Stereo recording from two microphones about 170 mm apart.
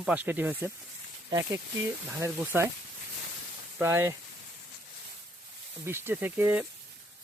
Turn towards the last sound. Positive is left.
turn(degrees=-10)  # may be behind; listen again after turning